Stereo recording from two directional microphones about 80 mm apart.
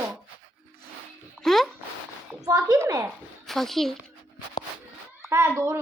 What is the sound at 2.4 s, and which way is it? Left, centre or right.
Speech, right.